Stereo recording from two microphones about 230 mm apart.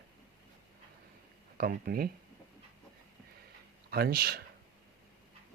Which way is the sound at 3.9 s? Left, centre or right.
Right.